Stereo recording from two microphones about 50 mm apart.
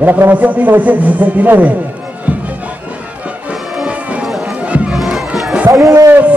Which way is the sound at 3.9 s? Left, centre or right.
Right.